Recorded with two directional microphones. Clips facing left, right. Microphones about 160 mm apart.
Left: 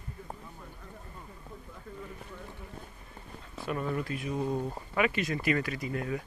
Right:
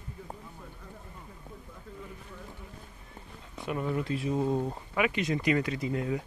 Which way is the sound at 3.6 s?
15° right (ahead or behind).